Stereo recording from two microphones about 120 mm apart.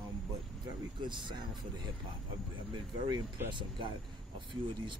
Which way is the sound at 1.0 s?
40° right (ahead or behind).